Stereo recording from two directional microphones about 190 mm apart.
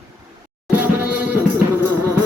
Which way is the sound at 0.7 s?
10° right (ahead or behind).